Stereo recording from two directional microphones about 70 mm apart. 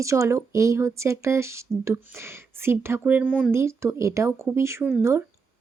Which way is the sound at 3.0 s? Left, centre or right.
Right.